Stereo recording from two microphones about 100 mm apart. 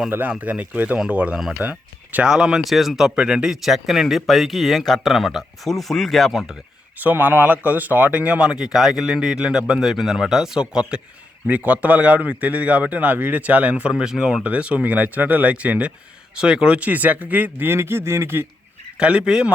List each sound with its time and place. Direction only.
0.1 s a man's voice: 15° right (ahead or behind); by 6.6 s centre (ahead or behind)
7.0 s a man's voice: 20° right (ahead or behind)
18.9 s a man's voice: 10° right (ahead or behind)